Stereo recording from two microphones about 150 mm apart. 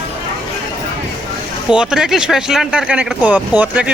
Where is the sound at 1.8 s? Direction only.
5° right (ahead or behind).